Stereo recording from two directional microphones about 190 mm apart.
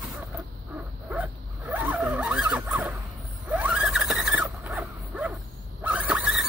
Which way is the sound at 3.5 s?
5° right (ahead or behind).